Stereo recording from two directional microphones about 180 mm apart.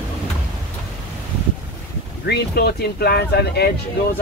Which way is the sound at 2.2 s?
65° left (ahead or behind).